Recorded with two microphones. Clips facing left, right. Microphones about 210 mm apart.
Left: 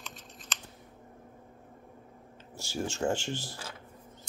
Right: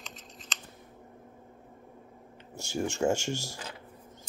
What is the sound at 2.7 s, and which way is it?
Speech, 15° right (ahead or behind).